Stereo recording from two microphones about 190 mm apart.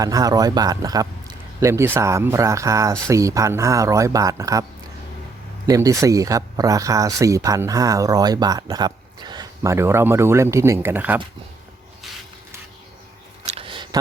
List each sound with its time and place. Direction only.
0.0 s speech: 20° right (ahead or behind)
5.6 s speech: 15° right (ahead or behind)
13.4 s a sound: 30° right (ahead or behind)